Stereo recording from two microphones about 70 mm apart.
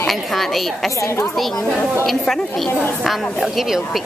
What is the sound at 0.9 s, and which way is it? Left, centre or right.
Speech, left.